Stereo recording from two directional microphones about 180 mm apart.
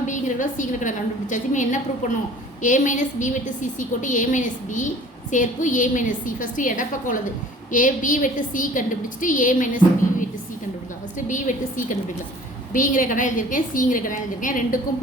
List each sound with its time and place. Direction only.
0.0 s a woman's voice: 45° left (ahead or behind)
11.3 s a woman's voice: 45° left (ahead or behind)